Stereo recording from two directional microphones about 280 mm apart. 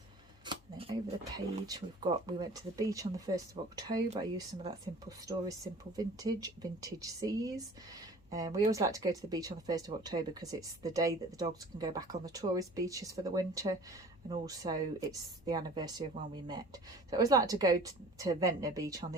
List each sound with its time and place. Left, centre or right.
0.4 s camera: centre
1.6 s speech: centre